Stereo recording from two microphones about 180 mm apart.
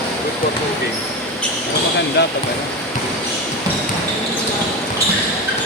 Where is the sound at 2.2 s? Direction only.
70° left (ahead or behind).